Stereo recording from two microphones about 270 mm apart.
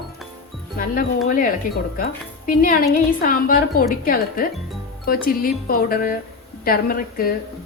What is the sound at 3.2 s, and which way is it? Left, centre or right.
Speech, left.